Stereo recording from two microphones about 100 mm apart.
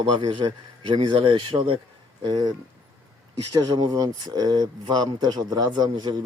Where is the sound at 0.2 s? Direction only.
55° right (ahead or behind).